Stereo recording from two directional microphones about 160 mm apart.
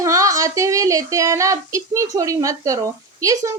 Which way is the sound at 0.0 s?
20° right (ahead or behind).